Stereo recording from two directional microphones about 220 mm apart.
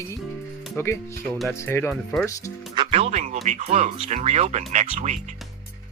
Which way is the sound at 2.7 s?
25° right (ahead or behind).